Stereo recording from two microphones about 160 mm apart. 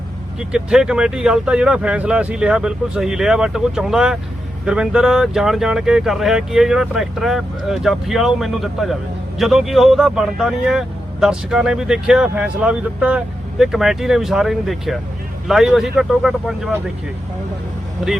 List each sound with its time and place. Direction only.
0.3 s speech: 5° right (ahead or behind)